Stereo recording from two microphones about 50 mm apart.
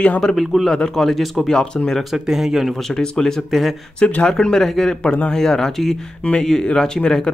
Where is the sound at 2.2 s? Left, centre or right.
Centre.